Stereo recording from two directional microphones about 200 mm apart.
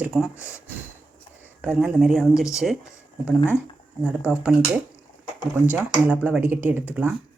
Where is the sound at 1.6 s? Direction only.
5° right (ahead or behind).